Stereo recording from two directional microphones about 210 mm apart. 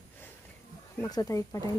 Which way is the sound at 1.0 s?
15° left (ahead or behind).